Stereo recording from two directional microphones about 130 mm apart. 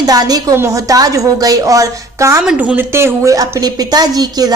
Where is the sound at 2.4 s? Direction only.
5° right (ahead or behind).